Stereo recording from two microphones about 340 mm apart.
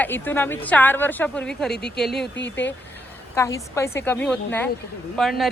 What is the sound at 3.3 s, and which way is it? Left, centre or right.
A woman's voice, centre.